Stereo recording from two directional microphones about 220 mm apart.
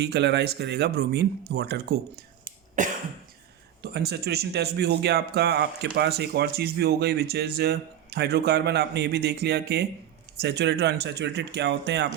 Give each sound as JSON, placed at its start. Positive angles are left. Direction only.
{"t": 0.0, "sound": "speech", "side_deg": -50}
{"t": 3.9, "sound": "speech", "side_deg": -45}